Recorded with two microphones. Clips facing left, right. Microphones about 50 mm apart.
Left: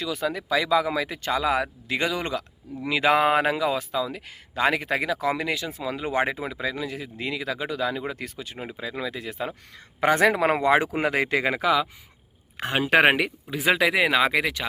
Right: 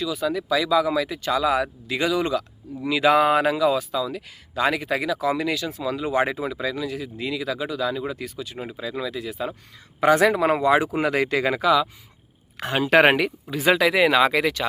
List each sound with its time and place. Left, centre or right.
0.2 s speech: left
8.8 s speech: left
10.9 s speech: left
13.0 s speech: centre